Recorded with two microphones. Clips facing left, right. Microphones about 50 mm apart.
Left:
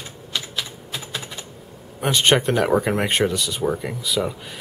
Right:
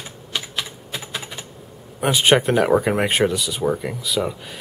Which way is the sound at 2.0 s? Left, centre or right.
Centre.